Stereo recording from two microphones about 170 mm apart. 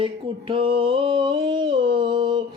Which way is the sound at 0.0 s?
30° right (ahead or behind).